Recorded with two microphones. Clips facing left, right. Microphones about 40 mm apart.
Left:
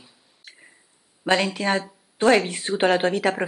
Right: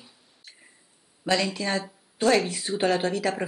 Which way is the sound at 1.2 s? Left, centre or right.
Left.